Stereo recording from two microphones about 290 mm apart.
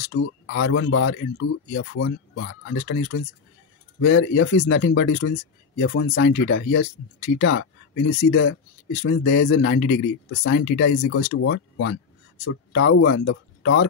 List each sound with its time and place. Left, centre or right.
0.1 s speech: left